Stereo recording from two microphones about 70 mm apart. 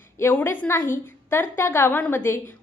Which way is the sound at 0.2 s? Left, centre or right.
Left.